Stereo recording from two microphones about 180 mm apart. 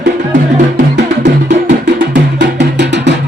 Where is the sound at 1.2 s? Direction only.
75° right (ahead or behind).